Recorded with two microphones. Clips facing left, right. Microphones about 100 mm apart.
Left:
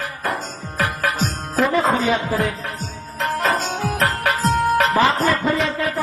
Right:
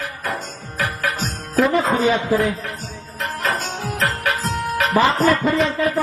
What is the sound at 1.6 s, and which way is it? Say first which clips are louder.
Speech: even; centre (ahead or behind).